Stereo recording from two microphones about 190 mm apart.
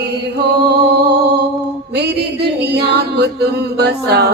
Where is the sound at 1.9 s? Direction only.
60° right (ahead or behind).